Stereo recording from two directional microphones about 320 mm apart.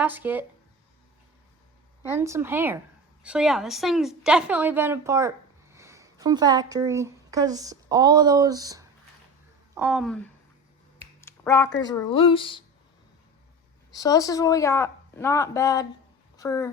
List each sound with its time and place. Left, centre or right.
0.0 s a woman's voice: centre
2.0 s a woman's voice: centre
11.3 s a sound: centre
11.8 s speech: centre
13.9 s speech: centre